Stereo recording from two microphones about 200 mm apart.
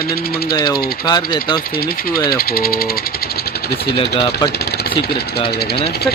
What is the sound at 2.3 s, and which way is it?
Speech, 50° left (ahead or behind).